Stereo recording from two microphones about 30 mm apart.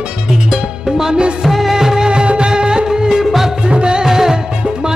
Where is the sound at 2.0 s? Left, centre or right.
Right; by 3.5 s centre.